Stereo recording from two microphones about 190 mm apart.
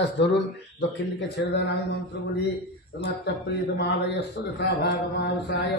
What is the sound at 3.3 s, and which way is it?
Speech, 65° left (ahead or behind).